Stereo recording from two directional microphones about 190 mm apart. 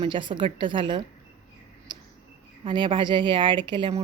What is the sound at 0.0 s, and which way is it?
Speech, 25° right (ahead or behind).